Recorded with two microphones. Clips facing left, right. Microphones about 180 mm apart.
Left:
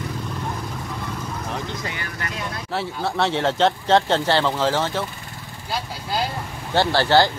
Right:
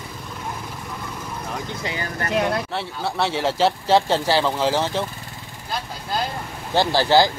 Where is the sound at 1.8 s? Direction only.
35° right (ahead or behind).